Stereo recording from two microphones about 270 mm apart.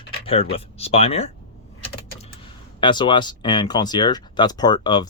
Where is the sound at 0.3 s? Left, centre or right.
Left.